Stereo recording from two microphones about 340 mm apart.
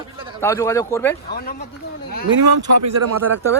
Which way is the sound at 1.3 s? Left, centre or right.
Left.